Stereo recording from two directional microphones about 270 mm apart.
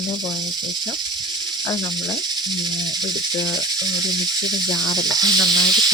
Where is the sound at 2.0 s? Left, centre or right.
Centre.